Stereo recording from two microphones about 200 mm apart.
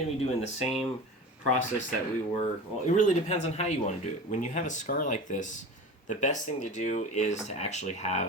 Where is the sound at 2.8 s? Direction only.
35° left (ahead or behind).